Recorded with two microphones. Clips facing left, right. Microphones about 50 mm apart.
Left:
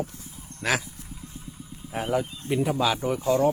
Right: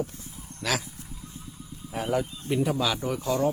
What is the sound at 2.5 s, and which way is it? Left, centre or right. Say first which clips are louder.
Speech: left 2 dB; centre.